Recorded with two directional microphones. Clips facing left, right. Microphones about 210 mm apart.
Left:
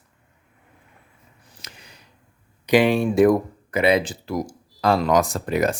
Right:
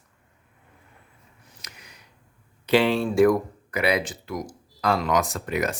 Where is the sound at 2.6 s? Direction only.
15° left (ahead or behind).